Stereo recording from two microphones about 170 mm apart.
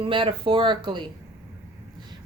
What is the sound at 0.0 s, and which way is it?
Speech, 30° right (ahead or behind).